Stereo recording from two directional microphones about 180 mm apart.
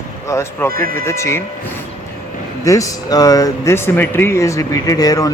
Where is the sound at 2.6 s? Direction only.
20° left (ahead or behind).